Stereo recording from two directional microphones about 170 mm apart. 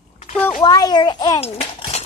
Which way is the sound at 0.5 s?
25° left (ahead or behind).